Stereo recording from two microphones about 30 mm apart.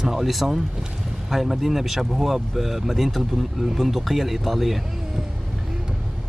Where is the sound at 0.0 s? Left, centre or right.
Centre.